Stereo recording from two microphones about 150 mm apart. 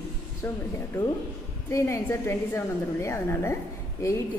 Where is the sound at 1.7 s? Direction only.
20° left (ahead or behind).